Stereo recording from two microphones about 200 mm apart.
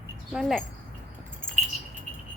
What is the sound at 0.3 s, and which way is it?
Speech, centre (ahead or behind).